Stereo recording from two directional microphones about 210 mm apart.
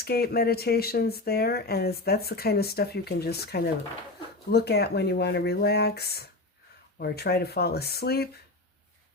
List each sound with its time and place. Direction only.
0.0 s speech: 50° left (ahead or behind)